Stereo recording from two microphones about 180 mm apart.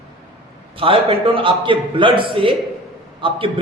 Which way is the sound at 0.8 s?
30° right (ahead or behind).